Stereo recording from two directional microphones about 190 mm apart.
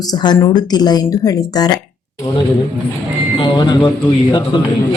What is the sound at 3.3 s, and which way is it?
Speech, 25° left (ahead or behind).